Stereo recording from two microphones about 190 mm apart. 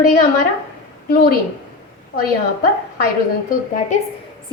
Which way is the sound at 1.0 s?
45° left (ahead or behind).